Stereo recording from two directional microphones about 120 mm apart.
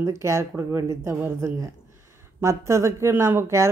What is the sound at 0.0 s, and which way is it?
Speech, 25° right (ahead or behind).